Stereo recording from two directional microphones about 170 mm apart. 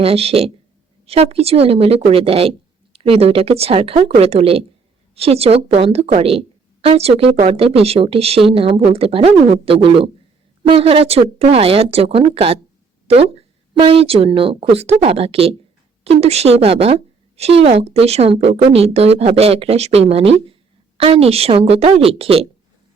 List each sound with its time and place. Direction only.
0.0 s a woman's voice: 35° right (ahead or behind)